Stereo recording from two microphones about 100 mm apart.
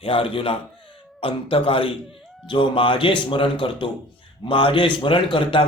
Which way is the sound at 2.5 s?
60° left (ahead or behind).